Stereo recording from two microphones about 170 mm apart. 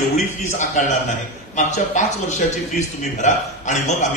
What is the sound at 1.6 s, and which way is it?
Speech, 45° left (ahead or behind).